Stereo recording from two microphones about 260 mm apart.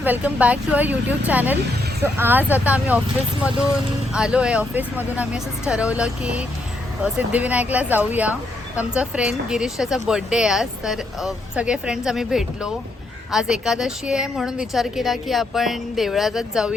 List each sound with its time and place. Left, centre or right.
0.0 s speech: centre
4.1 s speech: centre